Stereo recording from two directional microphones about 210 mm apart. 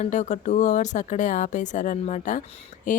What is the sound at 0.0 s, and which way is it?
Speech, 35° left (ahead or behind).